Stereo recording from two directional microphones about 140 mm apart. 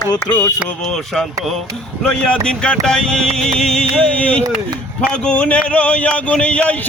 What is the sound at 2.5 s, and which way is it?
Music, 5° left (ahead or behind).